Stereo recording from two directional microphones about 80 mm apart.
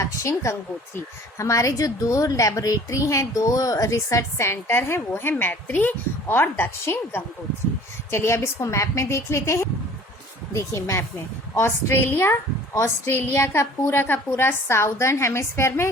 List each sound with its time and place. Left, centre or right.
0.0 s a woman's voice: left